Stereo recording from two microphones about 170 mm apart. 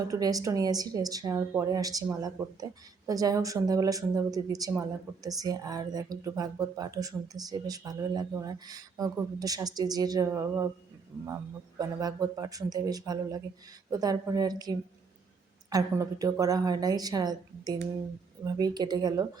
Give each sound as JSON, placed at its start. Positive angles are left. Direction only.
{"t": 0.1, "sound": "speech", "side_deg": -20}
{"t": 11.8, "sound": "speech", "side_deg": -20}